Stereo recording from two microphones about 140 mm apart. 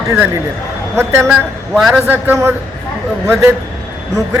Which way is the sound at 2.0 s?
15° right (ahead or behind).